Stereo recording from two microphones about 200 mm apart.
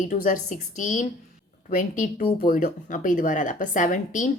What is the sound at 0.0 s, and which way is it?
A woman's voice, 40° left (ahead or behind).